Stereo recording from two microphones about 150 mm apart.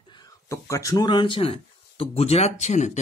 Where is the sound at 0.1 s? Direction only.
25° left (ahead or behind).